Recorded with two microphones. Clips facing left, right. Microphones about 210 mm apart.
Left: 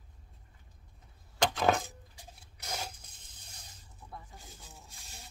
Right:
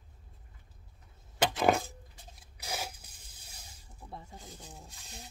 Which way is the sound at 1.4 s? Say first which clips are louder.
Right 1 dB; 5° right (ahead or behind).